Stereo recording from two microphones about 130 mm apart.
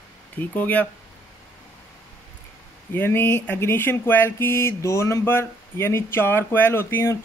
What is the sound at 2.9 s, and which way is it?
Speech, 15° left (ahead or behind).